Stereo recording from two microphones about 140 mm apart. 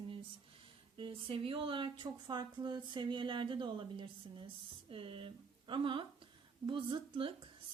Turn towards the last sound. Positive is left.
turn(degrees=-40)  # may be behind; listen again after turning